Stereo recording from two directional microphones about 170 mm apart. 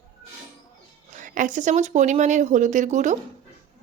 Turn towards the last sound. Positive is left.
turn(degrees=-45)  # may be behind; listen again after turning